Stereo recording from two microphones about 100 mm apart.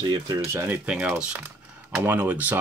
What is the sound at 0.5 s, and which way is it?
Speech, 20° right (ahead or behind).